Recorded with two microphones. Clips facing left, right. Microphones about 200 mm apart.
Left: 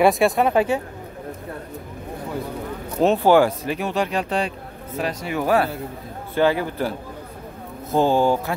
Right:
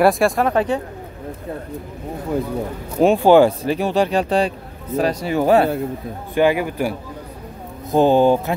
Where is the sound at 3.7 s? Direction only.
30° right (ahead or behind).